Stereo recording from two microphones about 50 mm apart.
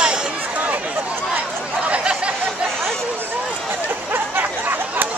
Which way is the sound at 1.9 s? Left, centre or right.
Right.